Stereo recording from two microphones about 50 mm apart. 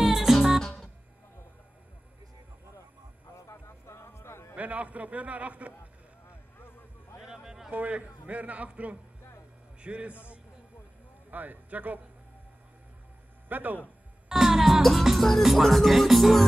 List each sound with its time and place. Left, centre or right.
0.0 s music: centre
0.6 s music: centre
3.4 s a sound: left
4.6 s a man's voice: right
7.2 s music: centre
7.7 s a man's voice: right
11.2 s speech: right
13.5 s speech: right
14.3 s music: centre
14.8 s music: centre